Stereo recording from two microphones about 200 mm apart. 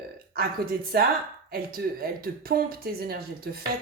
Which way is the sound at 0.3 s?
50° right (ahead or behind).